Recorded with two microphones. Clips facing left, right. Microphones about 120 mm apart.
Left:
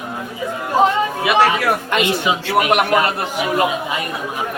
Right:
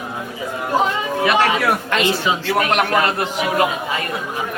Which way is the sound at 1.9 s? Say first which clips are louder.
Left 1 dB; 15° left (ahead or behind).